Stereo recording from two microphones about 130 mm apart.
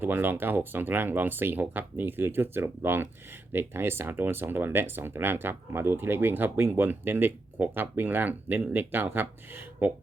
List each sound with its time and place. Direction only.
0.0 s speech: 15° right (ahead or behind)